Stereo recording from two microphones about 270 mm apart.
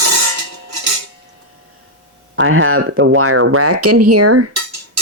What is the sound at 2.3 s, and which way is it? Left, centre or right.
Speech, right.